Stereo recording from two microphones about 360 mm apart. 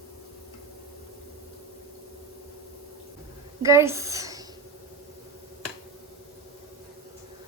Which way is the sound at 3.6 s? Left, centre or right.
Centre.